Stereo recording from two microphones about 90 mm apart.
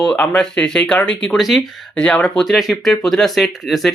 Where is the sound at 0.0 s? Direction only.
10° left (ahead or behind).